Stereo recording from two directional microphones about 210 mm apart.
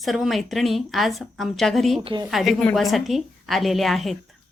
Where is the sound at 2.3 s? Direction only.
Centre (ahead or behind).